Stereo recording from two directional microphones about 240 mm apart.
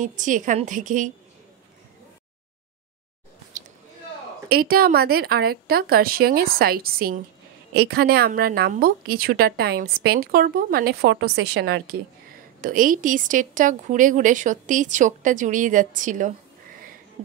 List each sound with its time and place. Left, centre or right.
0.0 s speech: right
4.5 s speech: right